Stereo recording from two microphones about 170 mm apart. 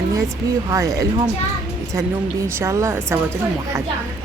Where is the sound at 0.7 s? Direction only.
20° right (ahead or behind).